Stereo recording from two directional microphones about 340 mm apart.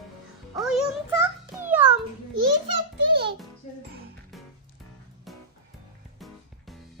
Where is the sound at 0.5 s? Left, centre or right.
Centre.